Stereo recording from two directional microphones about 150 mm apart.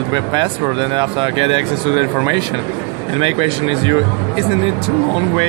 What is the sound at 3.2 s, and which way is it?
Speech, 35° right (ahead or behind).